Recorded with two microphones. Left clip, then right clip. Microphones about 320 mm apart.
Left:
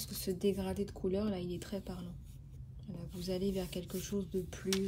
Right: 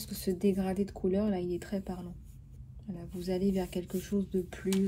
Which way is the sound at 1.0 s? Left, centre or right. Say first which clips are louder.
Right 5 dB; centre.